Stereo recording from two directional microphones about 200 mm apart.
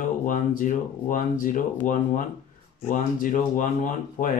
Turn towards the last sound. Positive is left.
turn(degrees=40)  # may be behind; listen again after turning